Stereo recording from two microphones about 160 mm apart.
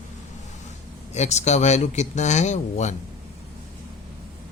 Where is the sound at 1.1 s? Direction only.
45° left (ahead or behind).